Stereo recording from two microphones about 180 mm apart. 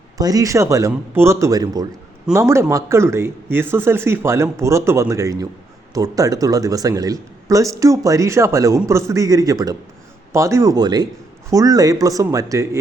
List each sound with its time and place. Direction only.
0.2 s speech: 20° right (ahead or behind)